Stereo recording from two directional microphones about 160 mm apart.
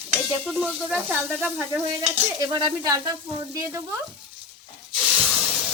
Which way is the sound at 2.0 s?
25° right (ahead or behind).